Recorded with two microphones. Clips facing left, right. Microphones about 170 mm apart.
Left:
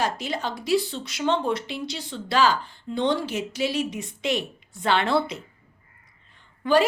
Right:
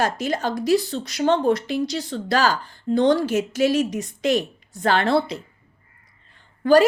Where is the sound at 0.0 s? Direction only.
45° right (ahead or behind).